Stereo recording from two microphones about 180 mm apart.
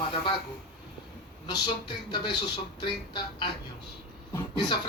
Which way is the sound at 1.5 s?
25° left (ahead or behind).